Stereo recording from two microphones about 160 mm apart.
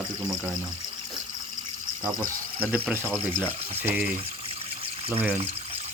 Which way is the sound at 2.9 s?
15° right (ahead or behind).